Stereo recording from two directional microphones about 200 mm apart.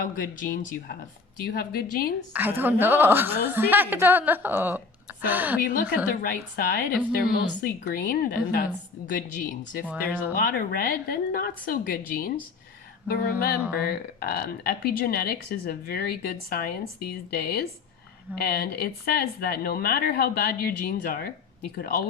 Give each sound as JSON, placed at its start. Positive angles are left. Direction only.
{"t": 0.0, "sound": "speech", "side_deg": 45}
{"t": 2.3, "sound": "a woman's voice", "side_deg": -10}
{"t": 5.5, "sound": "speech", "side_deg": 45}
{"t": 9.9, "sound": "a woman's voice", "side_deg": -10}
{"t": 10.3, "sound": "speech", "side_deg": 45}